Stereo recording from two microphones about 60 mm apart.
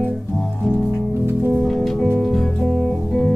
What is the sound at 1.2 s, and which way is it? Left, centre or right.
Music, right.